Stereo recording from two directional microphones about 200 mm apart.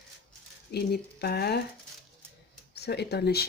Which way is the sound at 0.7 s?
55° left (ahead or behind).